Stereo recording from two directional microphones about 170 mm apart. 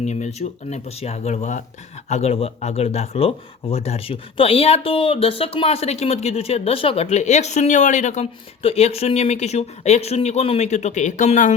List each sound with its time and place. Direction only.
0.0 s speech: 40° left (ahead or behind)